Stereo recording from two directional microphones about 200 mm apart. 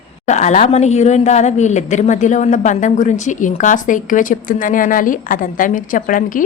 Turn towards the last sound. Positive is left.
turn(degrees=40)  # may be behind; listen again after turning